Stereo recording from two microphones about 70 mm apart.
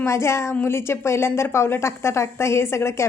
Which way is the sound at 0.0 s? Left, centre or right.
Left.